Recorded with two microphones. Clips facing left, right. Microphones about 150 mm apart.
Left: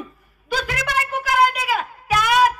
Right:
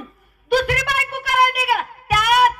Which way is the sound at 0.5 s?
60° right (ahead or behind).